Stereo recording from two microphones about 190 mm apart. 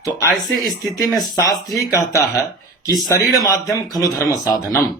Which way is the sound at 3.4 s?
20° left (ahead or behind).